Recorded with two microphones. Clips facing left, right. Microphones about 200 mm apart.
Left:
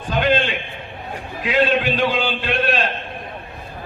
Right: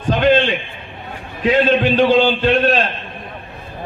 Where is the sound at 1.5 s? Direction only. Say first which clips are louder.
Right 4 dB; 40° right (ahead or behind).